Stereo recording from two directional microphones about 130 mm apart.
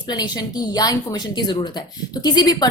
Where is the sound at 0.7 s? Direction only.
30° left (ahead or behind).